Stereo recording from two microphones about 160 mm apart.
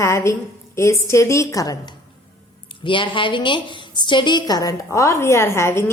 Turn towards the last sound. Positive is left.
turn(degrees=15)  # may be behind; listen again after turning